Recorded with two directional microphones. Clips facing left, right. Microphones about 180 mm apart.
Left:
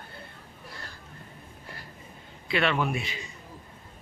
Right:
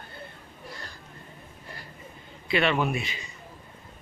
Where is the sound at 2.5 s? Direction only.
Centre (ahead or behind).